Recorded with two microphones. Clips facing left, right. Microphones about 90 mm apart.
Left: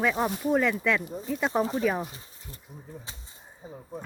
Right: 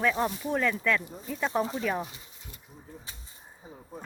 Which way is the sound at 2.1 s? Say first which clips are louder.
Left 3 dB; 35° left (ahead or behind).